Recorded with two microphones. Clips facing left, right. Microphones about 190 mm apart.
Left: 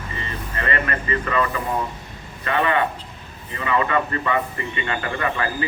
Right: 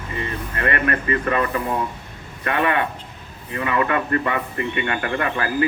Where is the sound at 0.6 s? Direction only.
55° right (ahead or behind).